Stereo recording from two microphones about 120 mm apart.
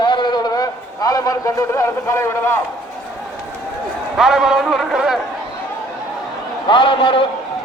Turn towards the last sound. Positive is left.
turn(degrees=45)  # may be behind; listen again after turning